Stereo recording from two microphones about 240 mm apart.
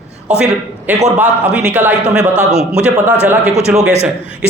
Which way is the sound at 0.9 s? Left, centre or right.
Centre.